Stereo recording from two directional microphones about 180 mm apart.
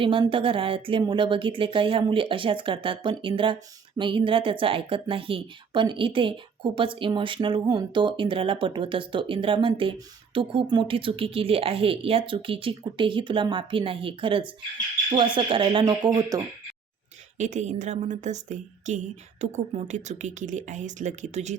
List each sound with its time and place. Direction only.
0.0 s speech: 30° right (ahead or behind)
17.3 s speech: 40° right (ahead or behind)